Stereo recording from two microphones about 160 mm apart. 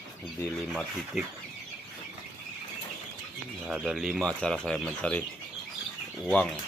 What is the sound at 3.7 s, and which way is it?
Speech, 5° right (ahead or behind).